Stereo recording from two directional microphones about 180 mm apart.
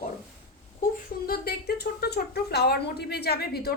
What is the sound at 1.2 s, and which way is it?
Speech, 60° left (ahead or behind).